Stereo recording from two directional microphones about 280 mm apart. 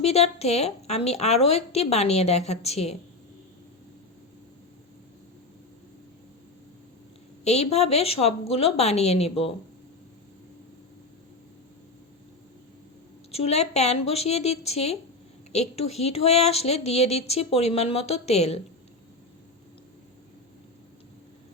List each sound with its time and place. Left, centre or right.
0.0 s speech: left
7.4 s speech: left
13.3 s speech: left